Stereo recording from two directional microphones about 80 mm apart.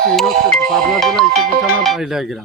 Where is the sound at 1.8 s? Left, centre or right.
Centre.